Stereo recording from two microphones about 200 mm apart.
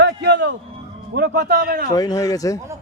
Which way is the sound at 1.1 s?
55° right (ahead or behind).